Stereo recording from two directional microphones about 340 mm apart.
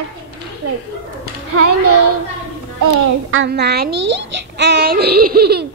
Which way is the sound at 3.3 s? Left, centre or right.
Right.